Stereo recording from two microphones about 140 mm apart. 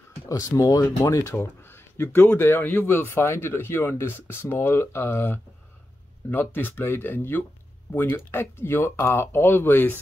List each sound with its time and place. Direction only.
0.3 s speech: 25° left (ahead or behind)